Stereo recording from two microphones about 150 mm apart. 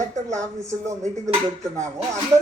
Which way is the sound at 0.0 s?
20° right (ahead or behind).